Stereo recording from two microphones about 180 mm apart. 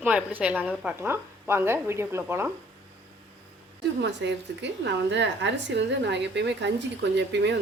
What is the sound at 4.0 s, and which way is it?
A woman's voice, 75° right (ahead or behind).